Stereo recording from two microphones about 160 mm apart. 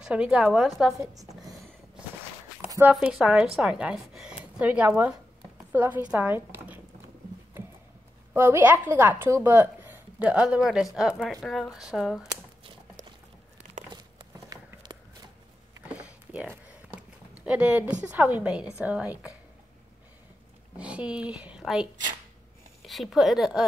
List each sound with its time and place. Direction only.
0.0 s a woman's voice: 5° right (ahead or behind)
2.9 s a woman's voice: 5° right (ahead or behind)
8.3 s a woman's voice: 10° right (ahead or behind)
13.9 s walk: 25° right (ahead or behind)
15.9 s a sound: 10° right (ahead or behind)
18.0 s a woman's voice: 10° right (ahead or behind)
20.7 s a woman's voice: 10° right (ahead or behind)